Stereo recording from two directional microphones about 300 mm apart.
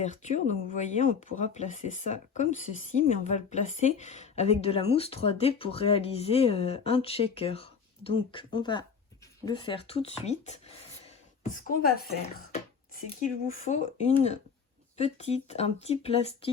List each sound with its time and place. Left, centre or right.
0.0 s speech: left